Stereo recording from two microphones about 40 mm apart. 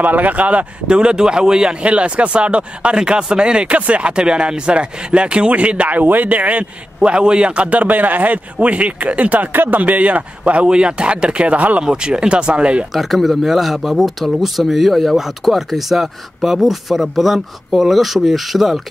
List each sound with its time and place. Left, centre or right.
0.0 s a man's voice: right
0.8 s speech: right
1.8 s speech: right
5.9 s a man's voice: right
9.5 s a man's voice: right
11.8 s speech: right
12.9 s speech: centre